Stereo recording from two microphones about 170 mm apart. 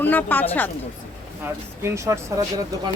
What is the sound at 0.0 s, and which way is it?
Speech, 10° left (ahead or behind).